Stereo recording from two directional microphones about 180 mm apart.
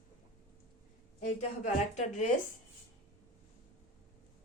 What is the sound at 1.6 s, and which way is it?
Speech, 40° left (ahead or behind).